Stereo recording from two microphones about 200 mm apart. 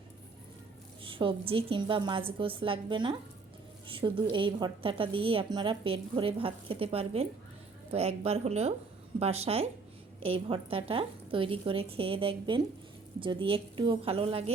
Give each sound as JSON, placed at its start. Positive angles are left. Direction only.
{"t": 1.0, "sound": "a woman's voice", "side_deg": -25}